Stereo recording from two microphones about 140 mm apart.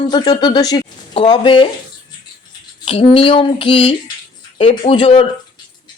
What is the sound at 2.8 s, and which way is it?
Speech, 40° left (ahead or behind).